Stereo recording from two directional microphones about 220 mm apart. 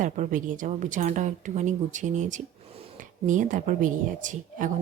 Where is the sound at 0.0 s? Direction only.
35° right (ahead or behind).